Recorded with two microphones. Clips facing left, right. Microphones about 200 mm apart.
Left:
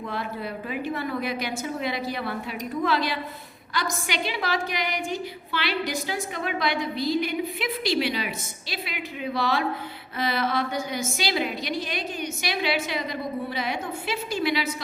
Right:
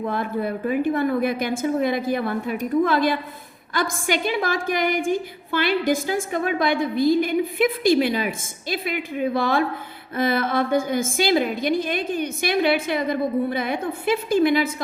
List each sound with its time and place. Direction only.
0.0 s a woman's voice: 50° right (ahead or behind)